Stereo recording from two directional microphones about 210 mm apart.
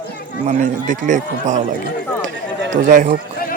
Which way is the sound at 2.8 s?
40° right (ahead or behind).